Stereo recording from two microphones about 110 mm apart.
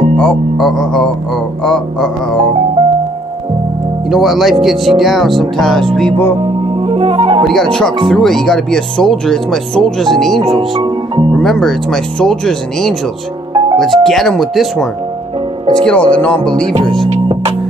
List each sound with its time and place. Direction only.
0.2 s speech: 5° left (ahead or behind)
4.1 s speech: centre (ahead or behind)
6.4 s music: 55° right (ahead or behind)
7.4 s speech: 5° left (ahead or behind)